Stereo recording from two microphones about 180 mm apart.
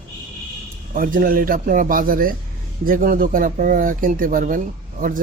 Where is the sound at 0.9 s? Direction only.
50° right (ahead or behind).